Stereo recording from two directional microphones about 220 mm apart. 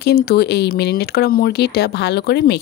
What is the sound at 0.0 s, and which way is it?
Speech, 45° left (ahead or behind).